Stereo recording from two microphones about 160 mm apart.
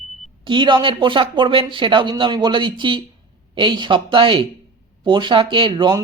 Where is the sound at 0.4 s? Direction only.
30° right (ahead or behind).